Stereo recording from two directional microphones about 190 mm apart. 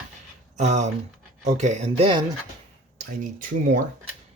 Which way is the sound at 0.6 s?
40° right (ahead or behind).